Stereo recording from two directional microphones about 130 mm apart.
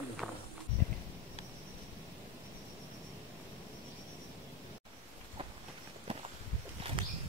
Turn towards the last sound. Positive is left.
turn(degrees=-45)  # may be behind; listen again after turning